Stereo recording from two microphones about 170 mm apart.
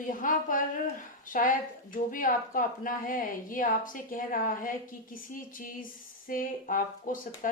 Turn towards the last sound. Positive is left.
turn(degrees=55)  # may be behind; listen again after turning